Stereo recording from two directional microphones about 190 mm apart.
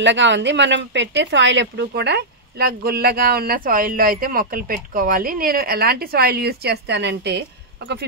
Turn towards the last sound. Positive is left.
turn(degrees=-65)  # may be behind; listen again after turning